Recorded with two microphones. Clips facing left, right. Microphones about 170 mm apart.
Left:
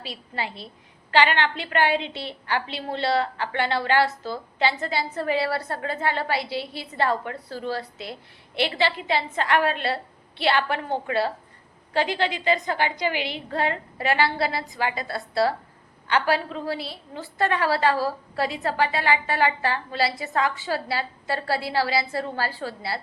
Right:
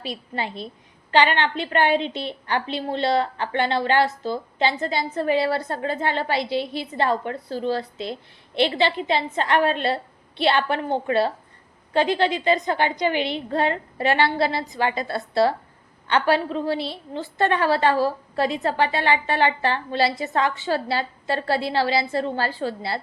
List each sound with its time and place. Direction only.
0.0 s a woman's voice: 20° right (ahead or behind)